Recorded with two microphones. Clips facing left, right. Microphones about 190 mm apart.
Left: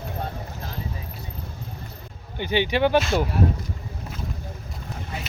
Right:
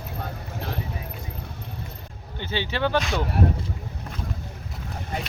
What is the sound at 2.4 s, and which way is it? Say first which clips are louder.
Speech: left 5 dB; 15° left (ahead or behind).